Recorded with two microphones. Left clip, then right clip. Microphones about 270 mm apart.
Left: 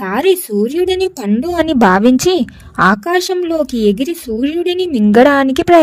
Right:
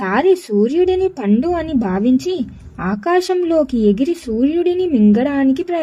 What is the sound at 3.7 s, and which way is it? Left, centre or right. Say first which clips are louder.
Speech: left 2 dB; left.